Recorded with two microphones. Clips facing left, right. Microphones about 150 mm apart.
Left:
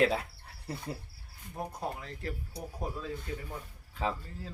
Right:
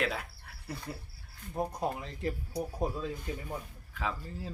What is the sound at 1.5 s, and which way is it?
Speech, 20° right (ahead or behind).